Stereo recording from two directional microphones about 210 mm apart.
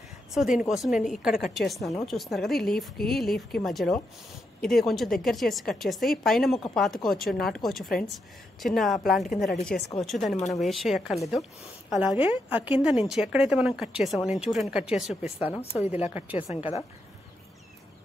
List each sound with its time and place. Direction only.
0.3 s a woman's voice: centre (ahead or behind)
15.6 s a woman's voice: 30° left (ahead or behind)
16.1 s a woman's voice: 10° right (ahead or behind)
16.4 s a woman's voice: 30° left (ahead or behind)